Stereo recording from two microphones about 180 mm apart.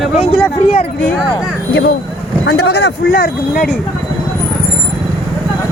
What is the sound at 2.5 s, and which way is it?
Speech, 70° left (ahead or behind).